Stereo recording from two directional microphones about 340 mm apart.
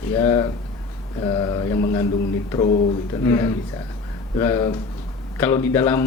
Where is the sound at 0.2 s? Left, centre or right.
Centre.